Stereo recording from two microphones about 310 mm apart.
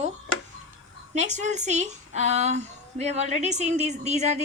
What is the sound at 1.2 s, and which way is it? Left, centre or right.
A woman's voice, right.